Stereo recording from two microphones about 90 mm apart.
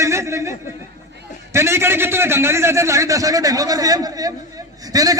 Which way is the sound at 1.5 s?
30° right (ahead or behind).